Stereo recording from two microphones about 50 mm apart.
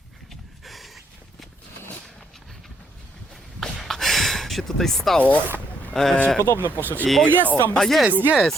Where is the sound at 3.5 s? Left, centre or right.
Centre.